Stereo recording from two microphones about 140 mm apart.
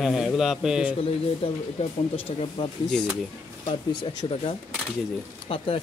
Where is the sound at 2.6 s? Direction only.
35° left (ahead or behind).